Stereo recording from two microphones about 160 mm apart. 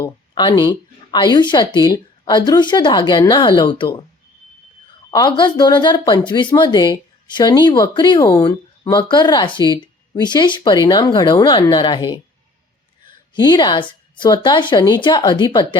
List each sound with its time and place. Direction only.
0.0 s speech: 25° left (ahead or behind)
5.1 s speech: 25° left (ahead or behind)
13.3 s speech: 25° left (ahead or behind)